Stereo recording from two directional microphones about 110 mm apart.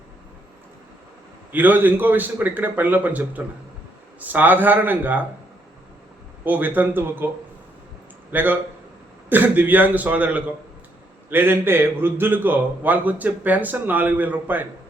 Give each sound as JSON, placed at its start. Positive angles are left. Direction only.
{"t": 1.5, "sound": "a man's voice", "side_deg": -15}
{"t": 6.4, "sound": "a man's voice", "side_deg": -15}
{"t": 8.3, "sound": "a man's voice", "side_deg": -15}